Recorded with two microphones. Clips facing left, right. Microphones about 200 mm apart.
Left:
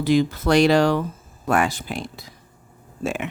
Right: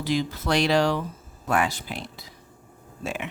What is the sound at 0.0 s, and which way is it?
Speech, 55° left (ahead or behind).